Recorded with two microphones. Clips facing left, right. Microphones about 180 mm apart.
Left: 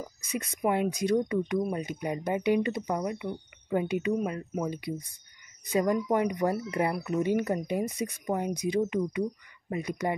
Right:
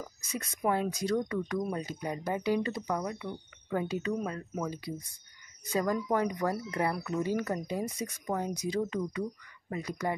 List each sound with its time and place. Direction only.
0.6 s speech: 20° left (ahead or behind)